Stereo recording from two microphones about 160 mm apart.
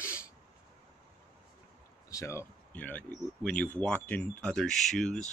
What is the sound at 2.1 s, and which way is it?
Speech, 20° left (ahead or behind).